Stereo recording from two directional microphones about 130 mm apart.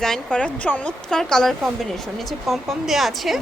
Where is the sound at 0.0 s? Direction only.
5° left (ahead or behind).